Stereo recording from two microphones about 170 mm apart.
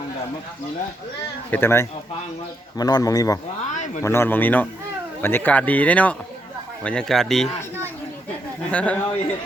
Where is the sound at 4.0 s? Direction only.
15° left (ahead or behind).